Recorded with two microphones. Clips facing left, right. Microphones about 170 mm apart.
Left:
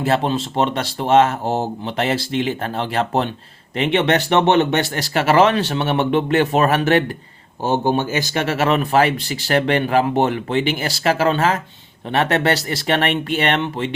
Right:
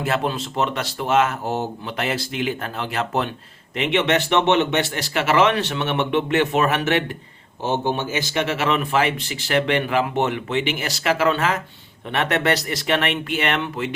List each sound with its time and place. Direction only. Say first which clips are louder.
0.0 s a man's voice: left 4 dB; 30° left (ahead or behind)